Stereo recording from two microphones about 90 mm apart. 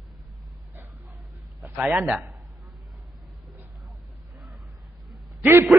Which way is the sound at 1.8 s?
5° right (ahead or behind).